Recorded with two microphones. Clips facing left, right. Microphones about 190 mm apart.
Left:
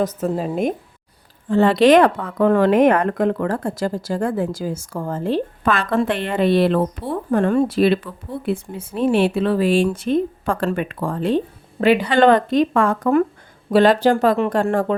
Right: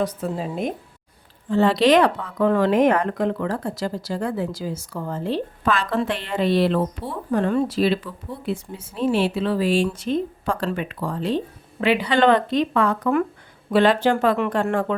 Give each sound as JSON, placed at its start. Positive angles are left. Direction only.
{"t": 0.0, "sound": "a woman's voice", "side_deg": 50}